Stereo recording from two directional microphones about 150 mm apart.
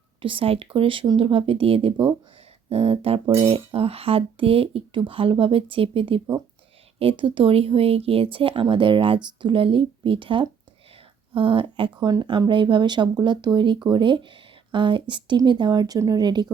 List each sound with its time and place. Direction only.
0.2 s speech: 35° right (ahead or behind)